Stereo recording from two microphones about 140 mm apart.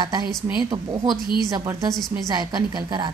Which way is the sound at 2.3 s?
30° right (ahead or behind).